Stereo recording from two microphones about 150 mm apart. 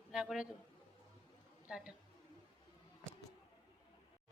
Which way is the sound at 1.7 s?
5° right (ahead or behind).